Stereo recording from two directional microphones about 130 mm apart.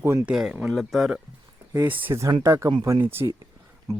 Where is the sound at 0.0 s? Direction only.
20° right (ahead or behind).